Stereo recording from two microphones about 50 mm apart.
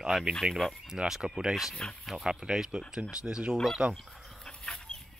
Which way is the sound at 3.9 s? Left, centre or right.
Centre.